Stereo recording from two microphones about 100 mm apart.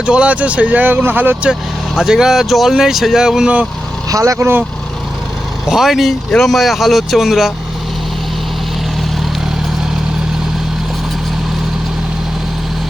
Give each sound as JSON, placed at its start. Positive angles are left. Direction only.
{"t": 0.0, "sound": "speech", "side_deg": -10}
{"t": 2.0, "sound": "speech", "side_deg": -5}
{"t": 4.1, "sound": "speech", "side_deg": -35}
{"t": 5.6, "sound": "speech", "side_deg": -5}